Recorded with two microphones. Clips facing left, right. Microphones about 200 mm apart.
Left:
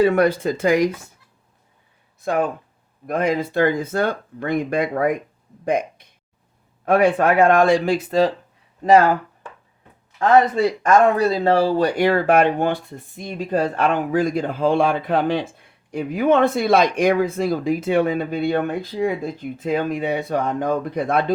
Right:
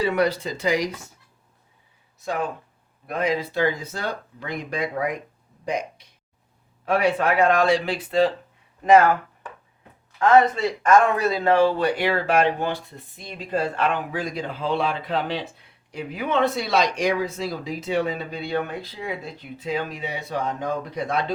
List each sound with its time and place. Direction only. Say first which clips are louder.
0.0 s speech: left 6 dB; 50° left (ahead or behind)
2.2 s speech: left 6 dB; 55° left (ahead or behind); by 9.1 s 35° left (ahead or behind)
10.8 s speech: left 2 dB; 35° left (ahead or behind); by 21.3 s 55° left (ahead or behind)